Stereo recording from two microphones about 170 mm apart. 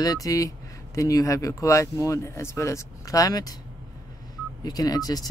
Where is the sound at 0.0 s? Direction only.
20° left (ahead or behind).